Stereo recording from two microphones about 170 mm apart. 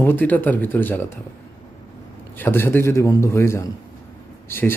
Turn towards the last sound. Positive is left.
turn(degrees=15)  # may be behind; listen again after turning